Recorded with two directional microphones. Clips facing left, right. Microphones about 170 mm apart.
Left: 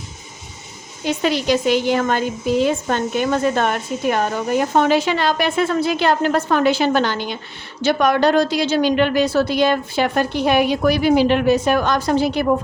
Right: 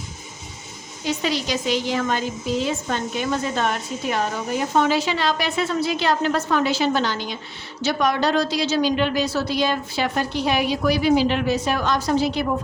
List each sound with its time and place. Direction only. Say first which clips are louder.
1.0 s a woman's voice: left 5 dB; 55° left (ahead or behind)